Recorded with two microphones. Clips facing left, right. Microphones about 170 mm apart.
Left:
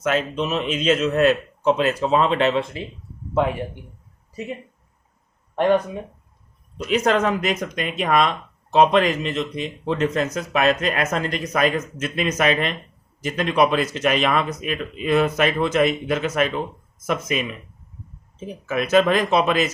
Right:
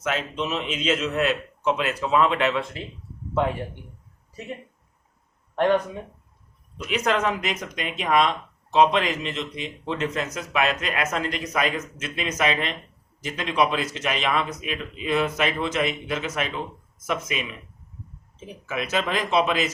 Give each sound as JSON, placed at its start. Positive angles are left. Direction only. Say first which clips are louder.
{"t": 0.0, "sound": "a man's voice", "louder": "left 5 dB", "side_deg": 50}
{"t": 6.7, "sound": "a man's voice", "louder": "left 5 dB", "side_deg": 35}